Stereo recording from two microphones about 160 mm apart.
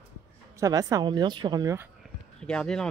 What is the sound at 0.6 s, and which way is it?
A woman's voice, 20° right (ahead or behind).